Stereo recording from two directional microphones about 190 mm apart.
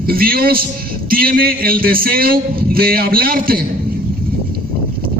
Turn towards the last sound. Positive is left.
turn(degrees=-50)  # may be behind; listen again after turning